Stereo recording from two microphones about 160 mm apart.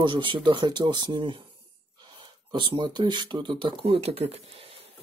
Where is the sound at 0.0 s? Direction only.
30° right (ahead or behind).